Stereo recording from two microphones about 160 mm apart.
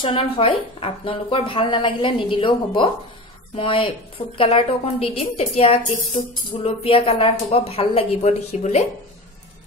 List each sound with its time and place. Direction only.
0.0 s speech: 35° left (ahead or behind)